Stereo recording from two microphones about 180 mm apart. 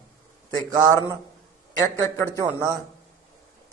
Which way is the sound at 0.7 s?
20° right (ahead or behind).